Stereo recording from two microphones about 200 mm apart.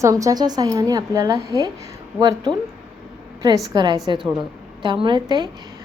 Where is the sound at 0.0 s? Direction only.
15° right (ahead or behind).